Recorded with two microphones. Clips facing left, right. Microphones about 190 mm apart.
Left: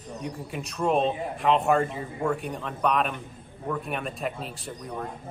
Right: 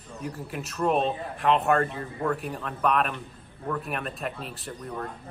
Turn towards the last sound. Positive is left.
turn(degrees=10)  # may be behind; listen again after turning